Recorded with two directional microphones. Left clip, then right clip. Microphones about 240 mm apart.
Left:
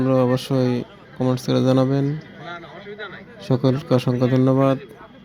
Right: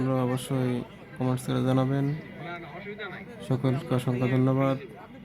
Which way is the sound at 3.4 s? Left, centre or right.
Left.